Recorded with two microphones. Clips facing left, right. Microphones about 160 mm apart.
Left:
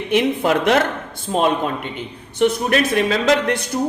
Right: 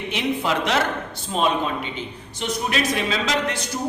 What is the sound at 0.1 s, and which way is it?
Speech, 55° left (ahead or behind).